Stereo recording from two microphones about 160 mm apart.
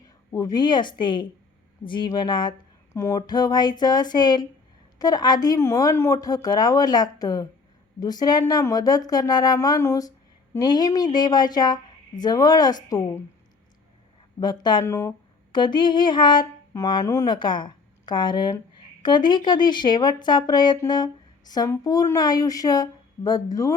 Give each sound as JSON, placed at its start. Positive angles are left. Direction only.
{"t": 0.3, "sound": "speech", "side_deg": 20}
{"t": 14.3, "sound": "speech", "side_deg": 25}
{"t": 15.5, "sound": "speech", "side_deg": 30}